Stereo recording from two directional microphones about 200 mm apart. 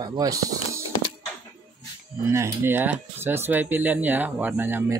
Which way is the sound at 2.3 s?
10° right (ahead or behind).